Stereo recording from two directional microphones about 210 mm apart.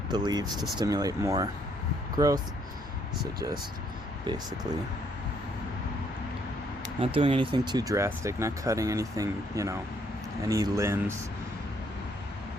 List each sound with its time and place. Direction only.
0.1 s speech: 20° right (ahead or behind)
7.0 s speech: 25° right (ahead or behind)